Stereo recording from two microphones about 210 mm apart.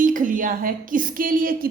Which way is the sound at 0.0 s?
40° right (ahead or behind).